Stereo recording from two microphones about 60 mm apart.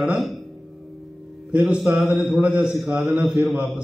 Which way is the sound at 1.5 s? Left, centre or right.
Right.